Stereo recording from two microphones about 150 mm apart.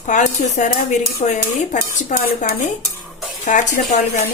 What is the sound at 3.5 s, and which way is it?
Speech, 55° left (ahead or behind).